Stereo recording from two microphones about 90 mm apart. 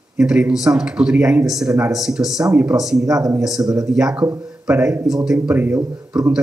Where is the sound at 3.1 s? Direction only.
40° right (ahead or behind).